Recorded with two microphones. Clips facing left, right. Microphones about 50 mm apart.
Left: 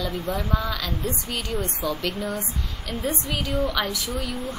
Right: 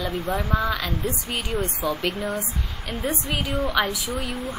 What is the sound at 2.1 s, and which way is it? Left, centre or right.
A woman's voice, right.